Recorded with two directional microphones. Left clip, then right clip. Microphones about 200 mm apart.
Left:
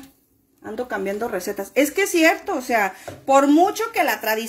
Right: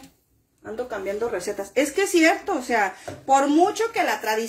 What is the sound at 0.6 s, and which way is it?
Speech, 50° left (ahead or behind).